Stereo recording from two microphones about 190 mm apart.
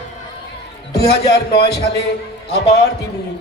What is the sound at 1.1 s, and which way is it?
Speech, 60° left (ahead or behind).